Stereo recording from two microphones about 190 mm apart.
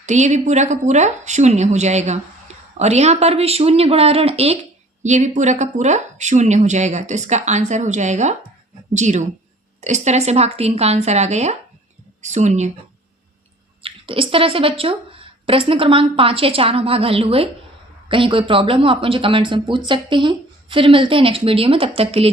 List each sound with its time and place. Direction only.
0.0 s speech: 40° right (ahead or behind)
13.8 s speech: 30° right (ahead or behind)